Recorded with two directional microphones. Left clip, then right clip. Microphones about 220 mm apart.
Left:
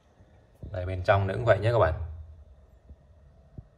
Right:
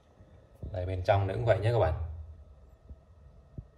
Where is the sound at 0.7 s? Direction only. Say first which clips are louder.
Left 3 dB; centre (ahead or behind).